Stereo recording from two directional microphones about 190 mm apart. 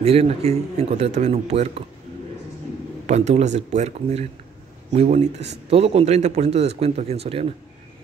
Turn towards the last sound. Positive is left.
turn(degrees=-30)  # may be behind; listen again after turning